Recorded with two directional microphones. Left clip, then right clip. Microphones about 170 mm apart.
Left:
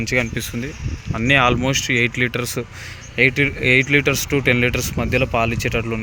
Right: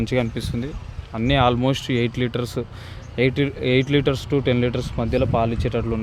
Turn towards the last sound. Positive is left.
turn(degrees=-5)  # may be behind; listen again after turning